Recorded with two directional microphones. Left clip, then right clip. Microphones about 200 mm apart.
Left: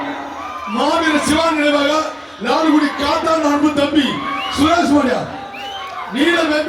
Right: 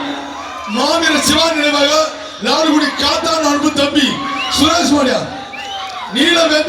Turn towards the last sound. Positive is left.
turn(degrees=-40)  # may be behind; listen again after turning